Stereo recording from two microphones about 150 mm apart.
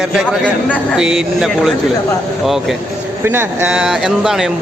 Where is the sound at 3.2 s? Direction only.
15° right (ahead or behind).